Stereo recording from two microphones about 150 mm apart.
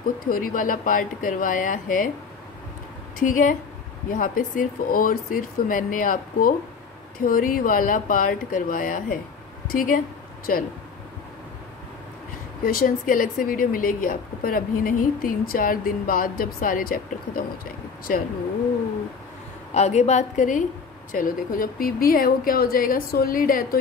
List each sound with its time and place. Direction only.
0.2 s speech: 70° left (ahead or behind)
3.2 s a woman's voice: 60° left (ahead or behind)
12.6 s a woman's voice: 75° left (ahead or behind)
19.7 s a woman's voice: 50° left (ahead or behind); by 23.8 s 70° left (ahead or behind)